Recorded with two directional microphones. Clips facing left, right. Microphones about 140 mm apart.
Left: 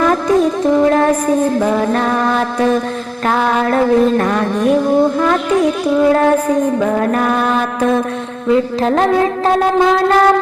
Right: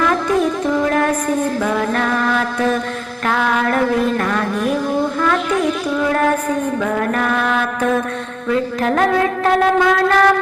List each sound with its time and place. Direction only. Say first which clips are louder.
0.8 s music: left 5 dB; 30° left (ahead or behind)
1.5 s mantra: left 4 dB; 30° left (ahead or behind)
8.4 s wind instrument: left 4 dB; 25° left (ahead or behind)